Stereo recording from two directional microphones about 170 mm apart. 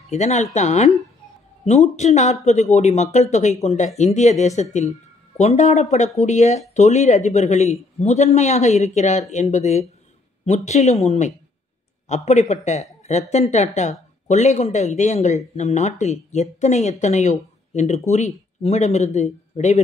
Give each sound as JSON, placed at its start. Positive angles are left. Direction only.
{"t": 0.1, "sound": "a man's voice", "side_deg": 45}